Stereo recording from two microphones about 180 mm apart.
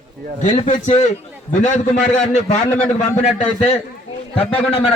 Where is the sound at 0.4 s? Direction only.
40° left (ahead or behind).